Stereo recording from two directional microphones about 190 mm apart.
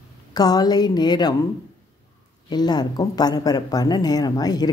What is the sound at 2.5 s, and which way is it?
Speech, 20° left (ahead or behind).